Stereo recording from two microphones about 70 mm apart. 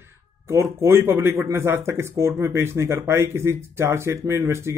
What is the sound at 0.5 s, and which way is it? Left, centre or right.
Speech, right.